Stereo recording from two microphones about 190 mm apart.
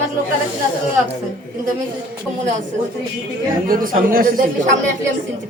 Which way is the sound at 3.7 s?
50° right (ahead or behind).